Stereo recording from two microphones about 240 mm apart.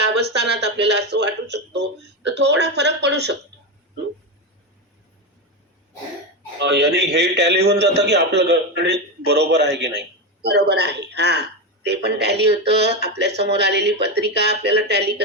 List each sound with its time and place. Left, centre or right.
0.0 s a man's voice: right
6.6 s a man's voice: right